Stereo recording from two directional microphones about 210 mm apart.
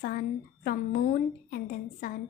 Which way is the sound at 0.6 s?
45° left (ahead or behind).